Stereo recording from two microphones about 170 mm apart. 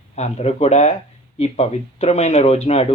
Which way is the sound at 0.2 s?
40° left (ahead or behind).